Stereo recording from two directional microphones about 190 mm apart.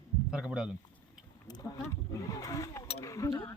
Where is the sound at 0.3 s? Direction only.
5° right (ahead or behind).